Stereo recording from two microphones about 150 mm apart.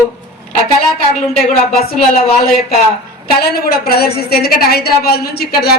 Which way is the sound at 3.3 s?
90° left.